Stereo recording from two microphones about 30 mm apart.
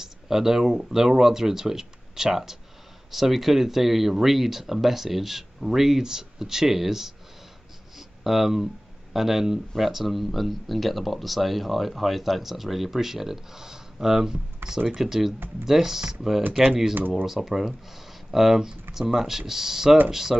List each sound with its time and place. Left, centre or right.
0.0 s a sound: centre
0.7 s speech: centre
8.2 s speech: centre
18.6 s speech: right